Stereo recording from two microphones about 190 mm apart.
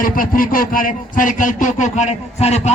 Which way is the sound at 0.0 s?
45° left (ahead or behind).